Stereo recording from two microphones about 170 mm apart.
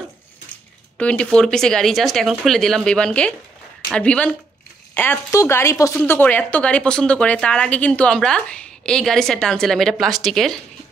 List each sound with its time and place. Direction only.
0.9 s a woman's voice: 5° left (ahead or behind)